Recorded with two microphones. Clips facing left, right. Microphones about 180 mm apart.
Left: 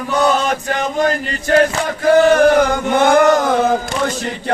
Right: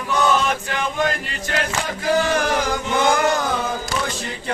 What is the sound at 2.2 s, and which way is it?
Chant, 55° left (ahead or behind).